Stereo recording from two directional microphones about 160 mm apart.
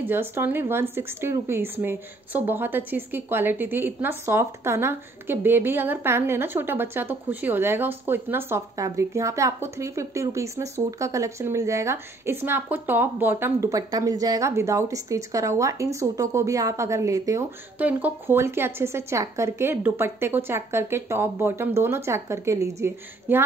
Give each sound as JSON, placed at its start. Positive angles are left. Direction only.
{"t": 0.0, "sound": "speech", "side_deg": -15}
{"t": 17.7, "sound": "speech", "side_deg": -10}